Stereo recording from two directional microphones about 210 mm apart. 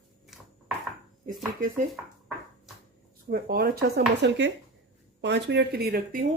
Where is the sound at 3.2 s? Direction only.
45° right (ahead or behind).